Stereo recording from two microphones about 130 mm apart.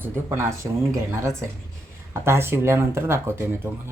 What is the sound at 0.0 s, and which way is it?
Speech, 20° right (ahead or behind).